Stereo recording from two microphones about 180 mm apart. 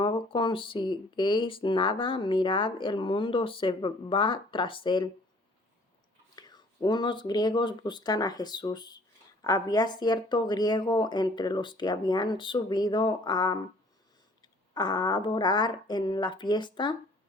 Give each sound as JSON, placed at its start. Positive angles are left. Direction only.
{"t": 0.0, "sound": "speech", "side_deg": 30}
{"t": 6.3, "sound": "speech", "side_deg": 20}
{"t": 14.7, "sound": "speech", "side_deg": 25}